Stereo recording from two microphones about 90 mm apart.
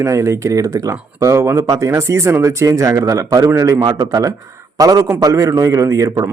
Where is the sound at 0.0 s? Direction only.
35° right (ahead or behind).